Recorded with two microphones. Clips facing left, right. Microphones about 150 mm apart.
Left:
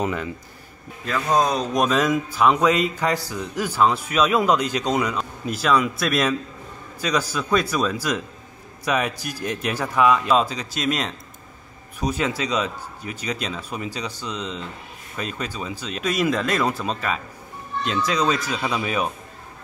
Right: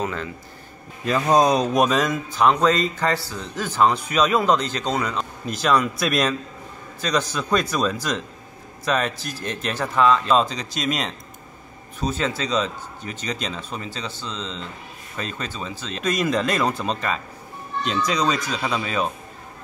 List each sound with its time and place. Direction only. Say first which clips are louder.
0.0 s a man's voice: left 2 dB; 15° left (ahead or behind)
1.0 s a man's voice: right 3 dB; 20° right (ahead or behind)
1.7 s a man's voice: even; centre (ahead or behind)
12.0 s a man's voice: left 1 dB; 10° left (ahead or behind)